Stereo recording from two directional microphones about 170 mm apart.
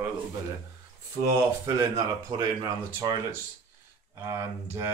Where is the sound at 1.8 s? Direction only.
20° right (ahead or behind).